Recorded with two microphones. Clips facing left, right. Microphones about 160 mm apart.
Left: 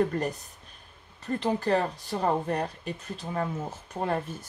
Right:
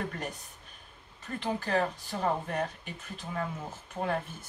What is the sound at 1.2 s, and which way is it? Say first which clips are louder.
Speech: left 6 dB; 35° left (ahead or behind).